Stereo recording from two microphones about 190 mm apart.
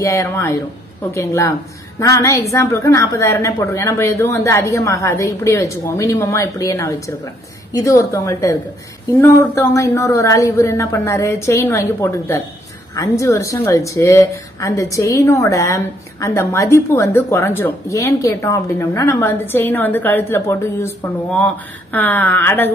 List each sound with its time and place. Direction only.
0.0 s speech: 15° left (ahead or behind)